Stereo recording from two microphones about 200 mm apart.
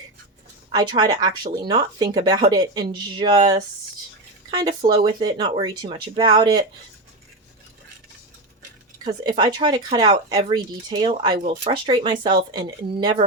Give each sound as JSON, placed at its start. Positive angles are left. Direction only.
{"t": 0.7, "sound": "speech", "side_deg": -20}
{"t": 4.9, "sound": "speech", "side_deg": -20}
{"t": 9.2, "sound": "speech", "side_deg": -25}